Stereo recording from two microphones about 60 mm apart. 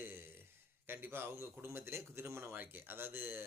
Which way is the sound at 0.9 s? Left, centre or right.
Right.